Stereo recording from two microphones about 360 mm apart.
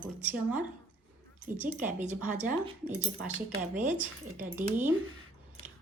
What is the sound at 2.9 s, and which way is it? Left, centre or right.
Speech, centre.